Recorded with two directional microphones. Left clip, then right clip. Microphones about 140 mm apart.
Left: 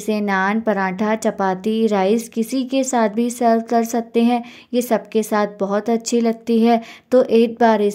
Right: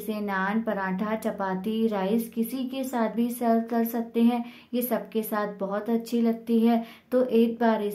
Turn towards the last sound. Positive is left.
turn(degrees=50)  # may be behind; listen again after turning